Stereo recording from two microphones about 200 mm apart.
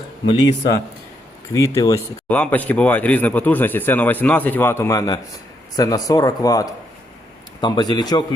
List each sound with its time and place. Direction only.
0.3 s speech: 20° left (ahead or behind)